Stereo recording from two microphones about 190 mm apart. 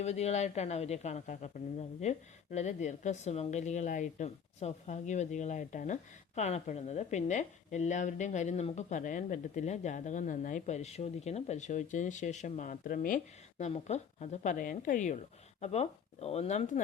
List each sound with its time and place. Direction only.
0.0 s speech: 35° left (ahead or behind)